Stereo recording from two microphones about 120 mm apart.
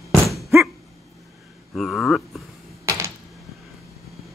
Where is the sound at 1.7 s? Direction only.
Centre (ahead or behind).